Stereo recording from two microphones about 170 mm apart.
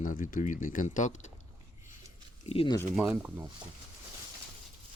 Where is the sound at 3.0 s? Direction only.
15° right (ahead or behind).